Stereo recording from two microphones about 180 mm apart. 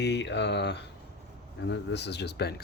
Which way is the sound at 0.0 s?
75° left (ahead or behind).